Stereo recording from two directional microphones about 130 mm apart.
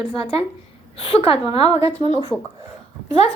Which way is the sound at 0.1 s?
45° left (ahead or behind).